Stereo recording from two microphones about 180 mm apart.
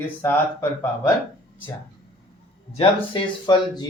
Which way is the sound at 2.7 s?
25° left (ahead or behind).